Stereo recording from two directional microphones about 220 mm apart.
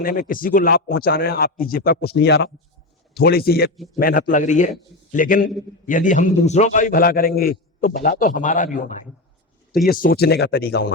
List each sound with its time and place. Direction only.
0.0 s a man's voice: 40° left (ahead or behind)